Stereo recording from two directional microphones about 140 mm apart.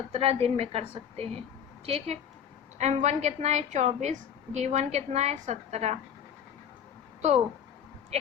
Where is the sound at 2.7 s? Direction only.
55° right (ahead or behind).